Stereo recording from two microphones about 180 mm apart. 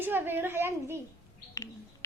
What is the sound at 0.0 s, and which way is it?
Speech, 10° right (ahead or behind).